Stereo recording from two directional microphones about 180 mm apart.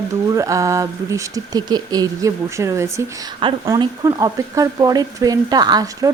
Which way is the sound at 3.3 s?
30° right (ahead or behind).